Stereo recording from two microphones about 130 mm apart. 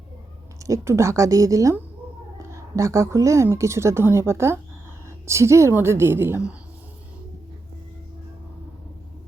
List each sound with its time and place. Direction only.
0.6 s a woman's voice: 20° right (ahead or behind)